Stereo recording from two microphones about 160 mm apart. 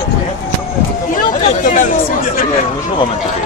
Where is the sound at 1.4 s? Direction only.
55° left (ahead or behind).